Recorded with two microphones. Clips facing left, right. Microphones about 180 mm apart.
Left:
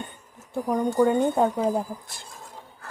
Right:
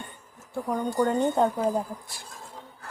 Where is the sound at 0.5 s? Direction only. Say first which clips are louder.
Left 4 dB; 20° left (ahead or behind).